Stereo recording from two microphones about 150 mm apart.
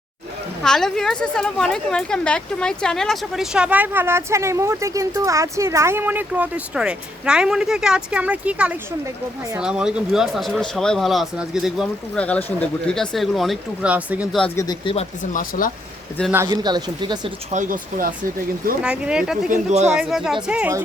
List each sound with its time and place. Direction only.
0.6 s a woman's voice: 5° left (ahead or behind)
12.2 s a woman's voice: 10° left (ahead or behind); by 14.3 s 10° right (ahead or behind)
14.5 s speech: 20° left (ahead or behind)
15.2 s speech: 60° left (ahead or behind)
16.5 s speech: 30° right (ahead or behind)
17.5 s speech: 60° right (ahead or behind)
18.8 s a woman's voice: 5° right (ahead or behind)
19.5 s speech: 55° right (ahead or behind)
20.0 s a woman's voice: 5° right (ahead or behind)